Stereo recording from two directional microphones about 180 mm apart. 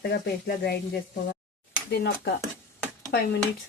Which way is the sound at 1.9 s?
60° left (ahead or behind).